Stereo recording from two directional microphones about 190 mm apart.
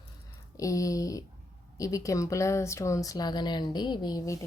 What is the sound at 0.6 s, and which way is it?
Speech, 20° left (ahead or behind).